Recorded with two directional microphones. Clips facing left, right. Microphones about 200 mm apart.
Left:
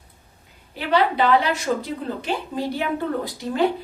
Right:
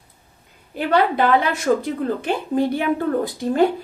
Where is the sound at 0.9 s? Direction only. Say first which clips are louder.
Right 1 dB; 50° right (ahead or behind).